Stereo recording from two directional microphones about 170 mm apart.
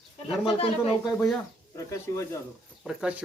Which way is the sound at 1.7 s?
15° left (ahead or behind).